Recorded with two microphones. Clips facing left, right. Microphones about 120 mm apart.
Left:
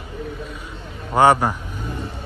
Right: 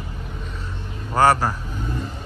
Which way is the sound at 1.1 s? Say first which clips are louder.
Left 2 dB; 20° left (ahead or behind).